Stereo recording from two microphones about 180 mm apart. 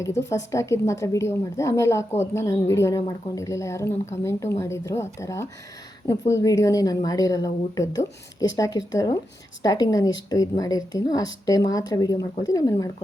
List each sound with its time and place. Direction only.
0.3 s a woman's voice: 15° left (ahead or behind)